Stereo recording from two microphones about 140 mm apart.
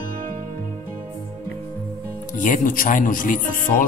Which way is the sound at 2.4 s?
70° left (ahead or behind).